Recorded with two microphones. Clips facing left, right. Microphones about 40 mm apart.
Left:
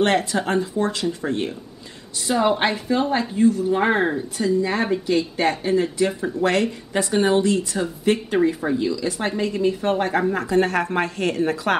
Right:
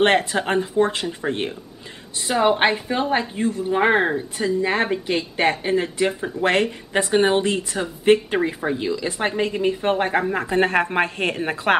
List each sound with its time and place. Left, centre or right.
0.0 s speech: right
4.6 s speech: right